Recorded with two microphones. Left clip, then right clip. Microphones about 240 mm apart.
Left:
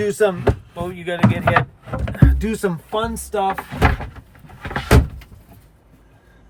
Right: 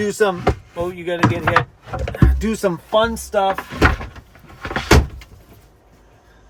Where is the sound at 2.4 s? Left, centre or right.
Centre.